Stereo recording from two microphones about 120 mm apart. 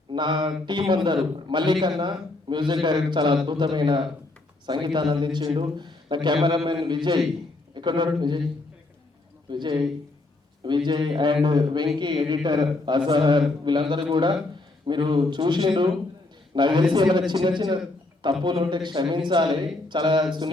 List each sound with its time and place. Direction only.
0.1 s a sound: 40° right (ahead or behind)
0.6 s a man's voice: 40° right (ahead or behind)
9.5 s a man's voice: 40° right (ahead or behind)